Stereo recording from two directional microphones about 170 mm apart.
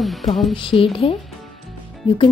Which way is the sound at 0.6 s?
30° left (ahead or behind).